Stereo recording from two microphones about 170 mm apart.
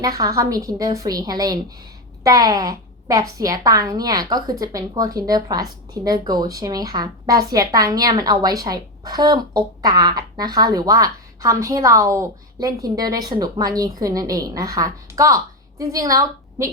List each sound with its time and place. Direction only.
0.0 s a woman's voice: 20° right (ahead or behind)